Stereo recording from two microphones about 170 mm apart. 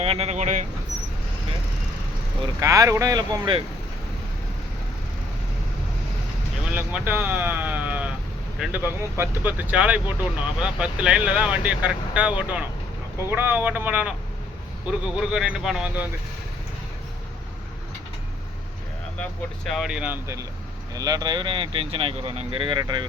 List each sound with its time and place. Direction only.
0.0 s speech: 35° right (ahead or behind)
2.6 s speech: 20° right (ahead or behind)
6.7 s speech: 10° right (ahead or behind)
19.6 s speech: centre (ahead or behind); by 23.0 s 25° right (ahead or behind)